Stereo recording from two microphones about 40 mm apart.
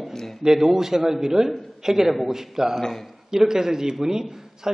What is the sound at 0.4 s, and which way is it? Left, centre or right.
A man's voice, centre.